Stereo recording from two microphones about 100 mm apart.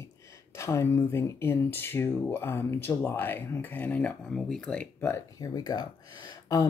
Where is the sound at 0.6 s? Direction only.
25° left (ahead or behind).